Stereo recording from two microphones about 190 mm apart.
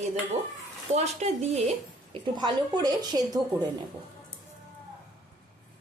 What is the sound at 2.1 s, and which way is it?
A woman's voice, 20° right (ahead or behind).